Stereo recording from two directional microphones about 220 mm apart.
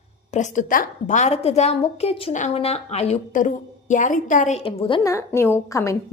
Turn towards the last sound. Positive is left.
turn(degrees=15)  # may be behind; listen again after turning